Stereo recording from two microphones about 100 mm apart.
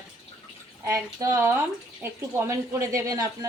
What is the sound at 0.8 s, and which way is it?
Speech, 30° right (ahead or behind).